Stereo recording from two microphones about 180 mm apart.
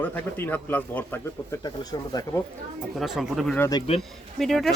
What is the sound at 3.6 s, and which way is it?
Speech, 20° left (ahead or behind).